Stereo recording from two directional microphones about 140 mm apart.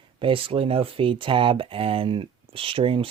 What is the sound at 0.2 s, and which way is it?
Speech, 40° right (ahead or behind).